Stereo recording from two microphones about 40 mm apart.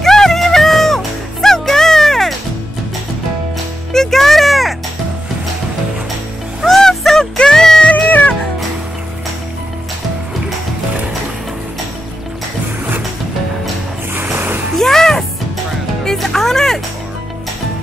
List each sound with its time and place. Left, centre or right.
0.0 s music: centre
3.9 s music: centre
6.6 s music: centre
8.1 s music: left
14.1 s a sound: right
14.8 s music: centre